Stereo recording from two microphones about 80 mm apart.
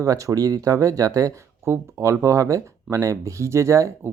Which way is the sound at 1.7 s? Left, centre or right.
Right.